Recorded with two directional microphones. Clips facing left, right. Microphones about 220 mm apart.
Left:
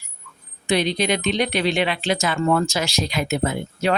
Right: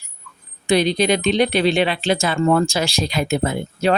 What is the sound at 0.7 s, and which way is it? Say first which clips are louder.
Speech: right 4 dB; 35° right (ahead or behind).